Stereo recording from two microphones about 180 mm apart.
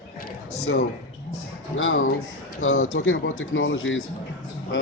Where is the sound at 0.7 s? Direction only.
90° left.